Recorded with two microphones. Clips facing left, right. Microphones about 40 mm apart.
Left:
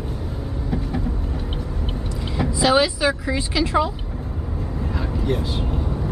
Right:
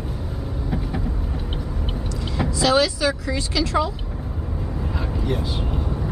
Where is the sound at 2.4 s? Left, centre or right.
Centre.